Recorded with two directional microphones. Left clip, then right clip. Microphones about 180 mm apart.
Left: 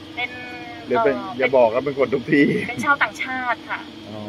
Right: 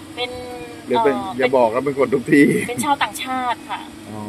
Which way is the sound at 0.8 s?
20° right (ahead or behind).